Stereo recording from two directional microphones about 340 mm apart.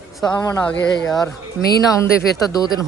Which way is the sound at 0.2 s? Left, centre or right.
Centre.